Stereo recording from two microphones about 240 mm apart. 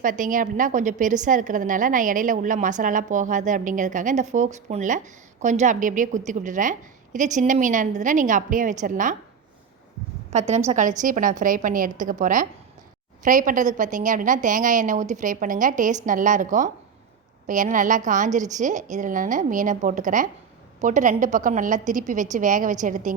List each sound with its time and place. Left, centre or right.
0.0 s a woman's voice: right
10.3 s a woman's voice: right